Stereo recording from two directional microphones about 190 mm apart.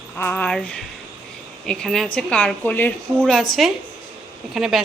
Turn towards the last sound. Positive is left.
turn(degrees=0)  # may be behind; listen again after turning